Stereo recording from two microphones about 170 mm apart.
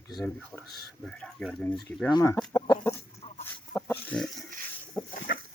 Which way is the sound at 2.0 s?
20° left (ahead or behind).